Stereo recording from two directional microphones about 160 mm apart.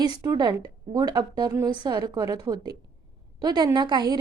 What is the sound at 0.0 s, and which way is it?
A woman's voice, 25° right (ahead or behind).